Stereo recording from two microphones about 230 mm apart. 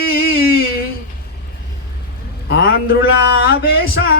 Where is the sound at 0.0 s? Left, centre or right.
Left.